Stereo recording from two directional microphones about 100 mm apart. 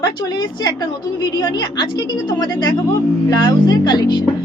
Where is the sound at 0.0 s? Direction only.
45° left (ahead or behind).